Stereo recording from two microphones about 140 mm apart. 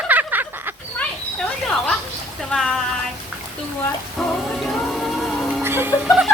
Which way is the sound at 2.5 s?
Centre (ahead or behind).